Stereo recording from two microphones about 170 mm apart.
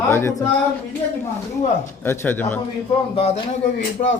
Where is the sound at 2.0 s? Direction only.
10° left (ahead or behind).